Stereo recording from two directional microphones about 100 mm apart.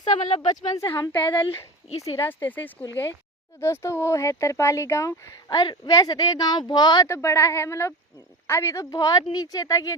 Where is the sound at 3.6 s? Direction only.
25° left (ahead or behind); by 7.0 s 45° left (ahead or behind).